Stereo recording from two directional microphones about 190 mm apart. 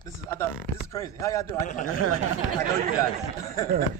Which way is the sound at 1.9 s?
90° left.